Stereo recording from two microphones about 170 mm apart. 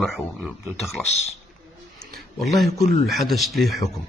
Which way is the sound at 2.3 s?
Centre (ahead or behind).